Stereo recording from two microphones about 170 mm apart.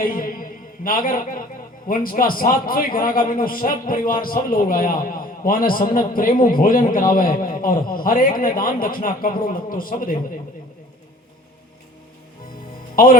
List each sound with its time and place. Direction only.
0.0 s a sound: 55° left (ahead or behind)
0.9 s a man's voice: 55° left (ahead or behind)
13.0 s a man's voice: 55° left (ahead or behind)